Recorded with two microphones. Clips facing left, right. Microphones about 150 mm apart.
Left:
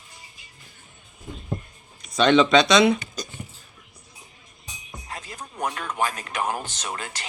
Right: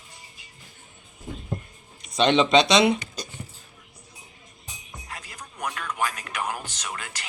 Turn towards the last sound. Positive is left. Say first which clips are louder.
# left 3 dB
turn(degrees=30)  # may be behind; listen again after turning